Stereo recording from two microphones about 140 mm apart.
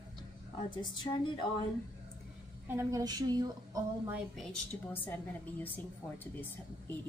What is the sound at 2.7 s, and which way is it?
A woman's voice, 20° right (ahead or behind).